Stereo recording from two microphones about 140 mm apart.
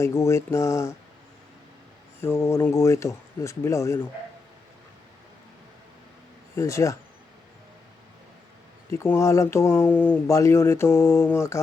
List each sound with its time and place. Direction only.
0.0 s speech: 20° left (ahead or behind)
2.2 s speech: 20° left (ahead or behind)
6.6 s speech: 20° left (ahead or behind)
8.9 s speech: 20° left (ahead or behind)